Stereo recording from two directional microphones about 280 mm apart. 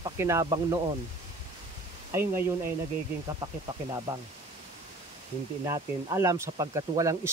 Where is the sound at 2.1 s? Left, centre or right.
Centre.